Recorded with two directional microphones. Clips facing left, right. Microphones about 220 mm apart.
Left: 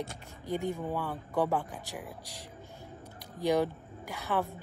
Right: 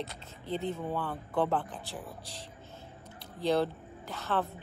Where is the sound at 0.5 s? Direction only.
10° left (ahead or behind).